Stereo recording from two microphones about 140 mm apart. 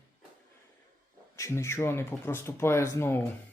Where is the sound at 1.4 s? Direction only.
20° left (ahead or behind).